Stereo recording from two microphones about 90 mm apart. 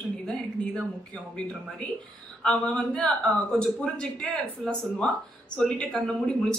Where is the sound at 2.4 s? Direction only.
10° left (ahead or behind).